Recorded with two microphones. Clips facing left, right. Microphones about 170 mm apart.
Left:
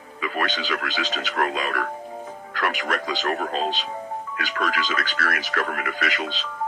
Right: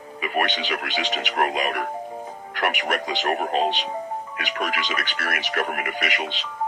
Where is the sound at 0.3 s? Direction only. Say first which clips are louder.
Right 2 dB; 25° right (ahead or behind).